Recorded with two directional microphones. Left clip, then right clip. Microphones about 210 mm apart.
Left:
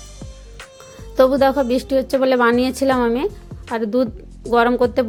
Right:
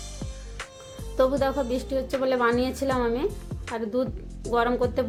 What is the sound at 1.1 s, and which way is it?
A woman's voice, 35° left (ahead or behind).